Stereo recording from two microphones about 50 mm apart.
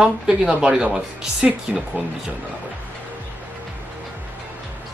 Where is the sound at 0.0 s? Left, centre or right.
Centre.